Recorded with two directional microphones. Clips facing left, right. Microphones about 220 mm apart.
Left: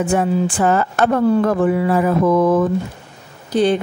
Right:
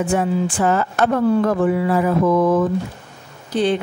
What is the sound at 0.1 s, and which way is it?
Music, 50° left (ahead or behind).